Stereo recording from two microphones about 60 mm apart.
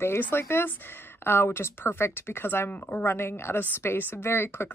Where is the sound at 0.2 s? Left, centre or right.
Left.